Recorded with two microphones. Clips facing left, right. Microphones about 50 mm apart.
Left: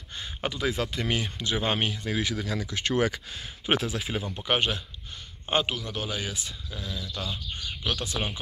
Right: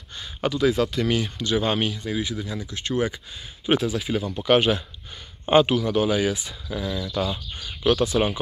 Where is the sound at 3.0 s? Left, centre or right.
Left.